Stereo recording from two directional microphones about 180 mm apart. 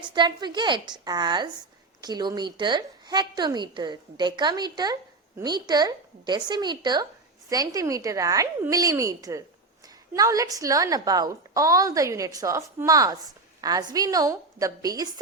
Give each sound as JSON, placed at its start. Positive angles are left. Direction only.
{"t": 0.0, "sound": "a woman's voice", "side_deg": -25}